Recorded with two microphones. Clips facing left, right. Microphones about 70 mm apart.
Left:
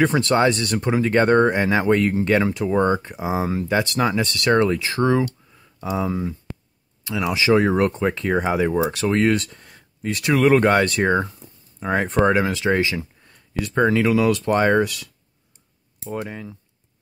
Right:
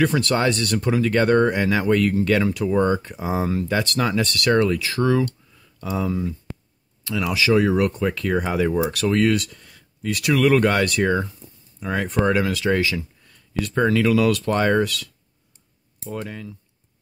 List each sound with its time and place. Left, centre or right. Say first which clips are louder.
0.0 s speech: left 2 dB; left